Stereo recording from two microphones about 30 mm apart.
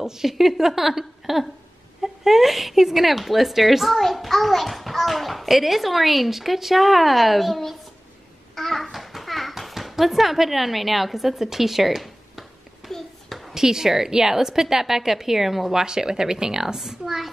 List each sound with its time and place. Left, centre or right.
0.0 s a woman's voice: centre
8.5 s babbling: centre
8.9 s a sound: centre
9.5 s a woman's voice: centre
12.9 s hands: centre
13.6 s a woman's voice: centre
15.8 s speech: right